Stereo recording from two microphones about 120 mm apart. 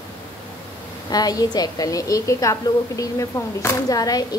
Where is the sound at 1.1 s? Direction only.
30° left (ahead or behind).